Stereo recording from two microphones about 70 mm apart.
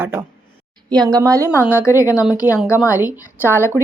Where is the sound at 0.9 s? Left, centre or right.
Right.